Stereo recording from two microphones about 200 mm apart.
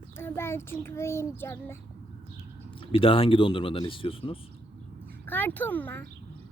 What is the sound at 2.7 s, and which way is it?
Speech, 25° left (ahead or behind).